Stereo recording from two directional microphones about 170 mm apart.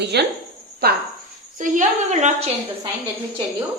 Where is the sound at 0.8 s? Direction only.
65° right (ahead or behind).